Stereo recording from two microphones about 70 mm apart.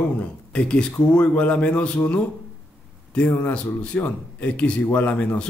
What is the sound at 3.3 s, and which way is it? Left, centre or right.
A man's voice, centre.